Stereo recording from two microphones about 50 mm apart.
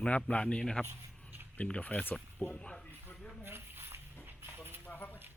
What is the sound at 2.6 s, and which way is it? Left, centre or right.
Speech, centre.